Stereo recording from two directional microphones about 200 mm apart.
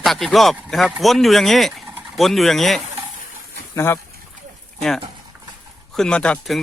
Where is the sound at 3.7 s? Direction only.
10° left (ahead or behind).